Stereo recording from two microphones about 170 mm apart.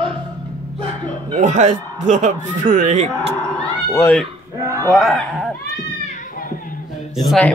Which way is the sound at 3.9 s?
10° left (ahead or behind).